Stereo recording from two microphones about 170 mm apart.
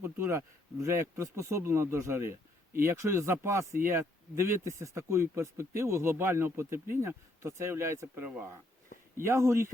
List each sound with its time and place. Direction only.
0.0 s speech: 15° right (ahead or behind)